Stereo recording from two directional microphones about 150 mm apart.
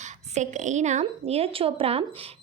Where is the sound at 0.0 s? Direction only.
55° right (ahead or behind).